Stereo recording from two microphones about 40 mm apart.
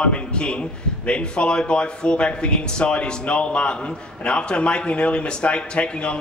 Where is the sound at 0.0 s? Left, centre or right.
Left.